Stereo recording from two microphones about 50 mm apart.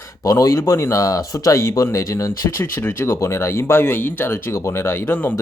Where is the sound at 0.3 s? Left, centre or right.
Left.